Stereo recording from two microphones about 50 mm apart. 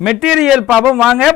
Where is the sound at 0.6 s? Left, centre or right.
Right.